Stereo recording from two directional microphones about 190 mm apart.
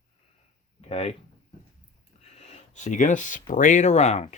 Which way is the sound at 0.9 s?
30° left (ahead or behind).